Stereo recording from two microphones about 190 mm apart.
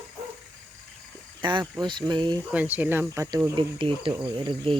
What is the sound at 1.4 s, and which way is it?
Speech, 25° right (ahead or behind).